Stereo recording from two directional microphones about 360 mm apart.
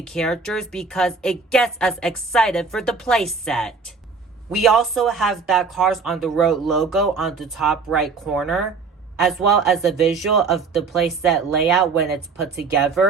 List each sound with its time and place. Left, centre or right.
0.0 s speech: centre